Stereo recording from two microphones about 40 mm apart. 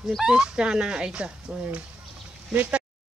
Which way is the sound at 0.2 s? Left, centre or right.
Centre.